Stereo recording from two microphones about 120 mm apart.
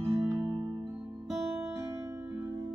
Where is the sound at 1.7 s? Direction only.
25° right (ahead or behind).